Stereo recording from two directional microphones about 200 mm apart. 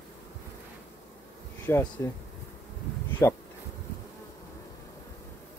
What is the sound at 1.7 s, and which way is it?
Speech, 10° left (ahead or behind).